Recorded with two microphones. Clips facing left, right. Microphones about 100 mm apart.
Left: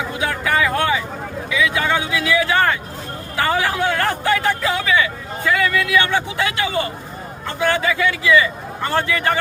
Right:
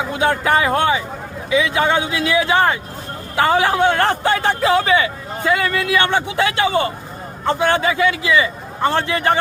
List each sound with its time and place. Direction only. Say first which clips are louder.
0.1 s speech: right 6 dB; 30° right (ahead or behind)